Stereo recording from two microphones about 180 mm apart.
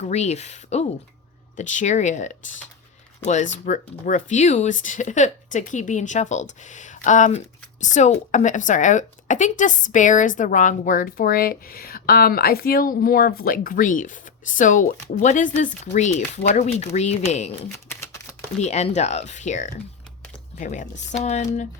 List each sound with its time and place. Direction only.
0.0 s speech: 40° left (ahead or behind)
17.8 s shuffling cards: 15° left (ahead or behind)
18.6 s speech: 40° left (ahead or behind)